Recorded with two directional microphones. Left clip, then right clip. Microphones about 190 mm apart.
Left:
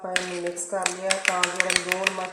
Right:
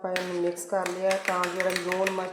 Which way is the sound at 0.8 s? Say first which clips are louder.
Left 1 dB; 10° right (ahead or behind).